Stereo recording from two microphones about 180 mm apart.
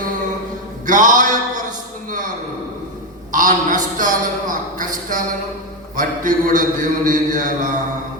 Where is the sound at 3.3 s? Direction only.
50° right (ahead or behind).